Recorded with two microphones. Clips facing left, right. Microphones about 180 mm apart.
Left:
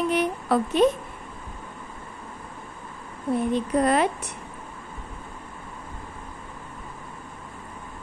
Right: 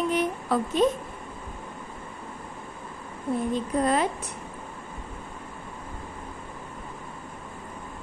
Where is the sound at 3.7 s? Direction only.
70° left (ahead or behind).